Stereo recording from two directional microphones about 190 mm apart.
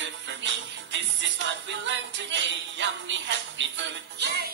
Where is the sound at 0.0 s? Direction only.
75° right (ahead or behind).